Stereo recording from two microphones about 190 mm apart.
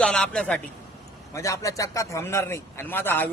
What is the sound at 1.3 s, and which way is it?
Speech, 15° left (ahead or behind).